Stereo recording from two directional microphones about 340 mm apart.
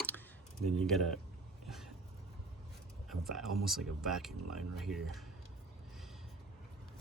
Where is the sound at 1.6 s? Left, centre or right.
Centre.